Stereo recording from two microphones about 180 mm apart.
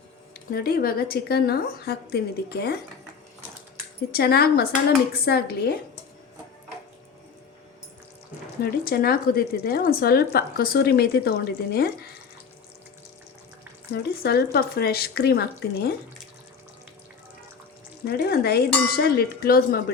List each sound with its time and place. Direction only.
0.3 s speech: 60° left (ahead or behind)
4.1 s speech: 60° left (ahead or behind)
8.8 s speech: 55° left (ahead or behind)
13.9 s speech: 60° left (ahead or behind)
18.1 s speech: 60° left (ahead or behind)